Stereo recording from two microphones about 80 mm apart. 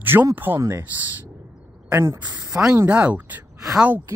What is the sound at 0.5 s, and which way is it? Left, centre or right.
Speech, right.